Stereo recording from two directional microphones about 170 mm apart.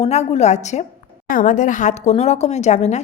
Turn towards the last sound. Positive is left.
turn(degrees=40)  # may be behind; listen again after turning